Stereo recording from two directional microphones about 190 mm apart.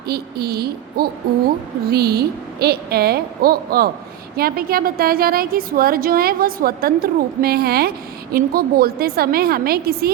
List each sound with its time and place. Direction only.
0.1 s a woman's voice: 55° right (ahead or behind)